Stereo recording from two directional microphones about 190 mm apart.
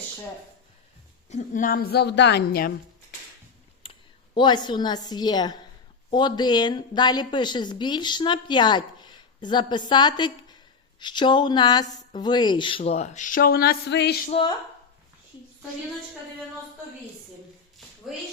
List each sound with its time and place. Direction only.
1.3 s a woman's voice: 40° left (ahead or behind)
4.4 s speech: 25° left (ahead or behind); by 14.2 s 60° left (ahead or behind)
14.3 s speech: 30° left (ahead or behind)